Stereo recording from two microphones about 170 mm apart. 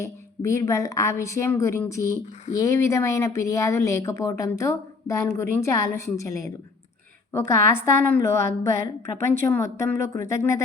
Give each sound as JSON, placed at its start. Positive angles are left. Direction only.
{"t": 0.0, "sound": "speech", "side_deg": 20}